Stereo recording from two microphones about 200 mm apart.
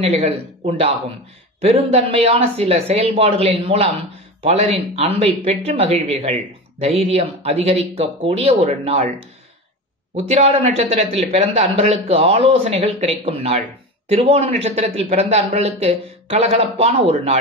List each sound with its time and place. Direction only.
0.0 s speech: 30° right (ahead or behind)
10.1 s speech: 30° right (ahead or behind)